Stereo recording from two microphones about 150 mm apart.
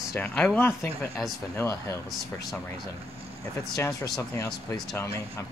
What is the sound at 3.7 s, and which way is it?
Speech, 20° left (ahead or behind).